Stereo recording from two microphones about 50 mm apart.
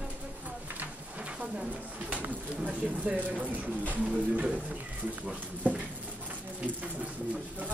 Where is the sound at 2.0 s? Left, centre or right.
Right.